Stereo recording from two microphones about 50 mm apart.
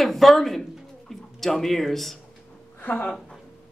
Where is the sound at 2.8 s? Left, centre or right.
Left.